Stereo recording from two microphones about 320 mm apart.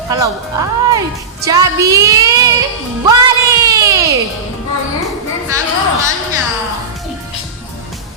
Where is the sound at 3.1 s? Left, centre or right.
Centre.